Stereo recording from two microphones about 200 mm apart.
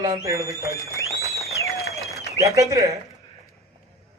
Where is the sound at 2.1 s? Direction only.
15° right (ahead or behind).